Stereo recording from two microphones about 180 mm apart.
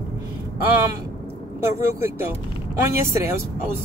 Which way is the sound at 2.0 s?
15° right (ahead or behind).